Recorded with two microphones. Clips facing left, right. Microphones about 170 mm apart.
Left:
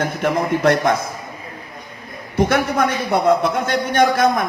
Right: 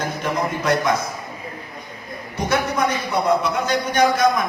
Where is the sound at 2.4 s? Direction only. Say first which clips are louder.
Left 4 dB; 55° left (ahead or behind).